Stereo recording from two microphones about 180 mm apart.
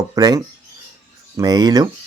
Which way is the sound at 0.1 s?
20° right (ahead or behind).